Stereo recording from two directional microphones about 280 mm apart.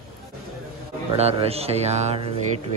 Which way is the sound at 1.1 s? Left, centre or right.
Right.